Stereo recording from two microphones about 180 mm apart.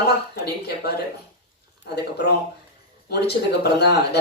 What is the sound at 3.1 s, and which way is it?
Speech, 65° left (ahead or behind).